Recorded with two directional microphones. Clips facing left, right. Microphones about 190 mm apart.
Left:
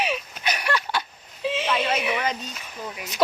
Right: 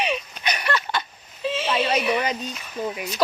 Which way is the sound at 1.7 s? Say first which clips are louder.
Right 2 dB; 15° right (ahead or behind).